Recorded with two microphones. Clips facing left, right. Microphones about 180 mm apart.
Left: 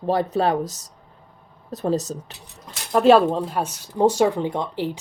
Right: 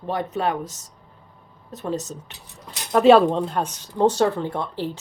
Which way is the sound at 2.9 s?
Centre (ahead or behind).